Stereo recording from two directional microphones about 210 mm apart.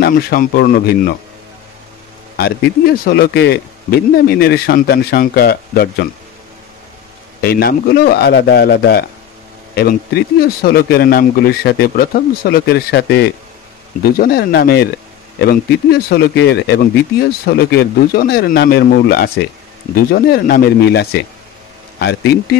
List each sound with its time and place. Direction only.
0.0 s a man's voice: 45° left (ahead or behind)
2.3 s a man's voice: 50° left (ahead or behind)
7.4 s a man's voice: 45° left (ahead or behind)